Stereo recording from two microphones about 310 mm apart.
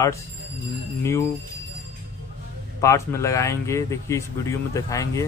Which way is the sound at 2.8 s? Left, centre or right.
Centre.